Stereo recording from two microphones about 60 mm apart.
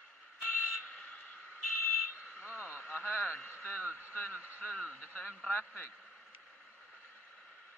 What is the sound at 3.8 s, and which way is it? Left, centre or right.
Speech, right.